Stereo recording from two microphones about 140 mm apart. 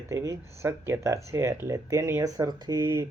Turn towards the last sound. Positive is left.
turn(degrees=-25)  # may be behind; listen again after turning